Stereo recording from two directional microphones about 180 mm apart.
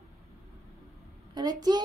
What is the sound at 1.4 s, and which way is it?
Speech, 20° right (ahead or behind).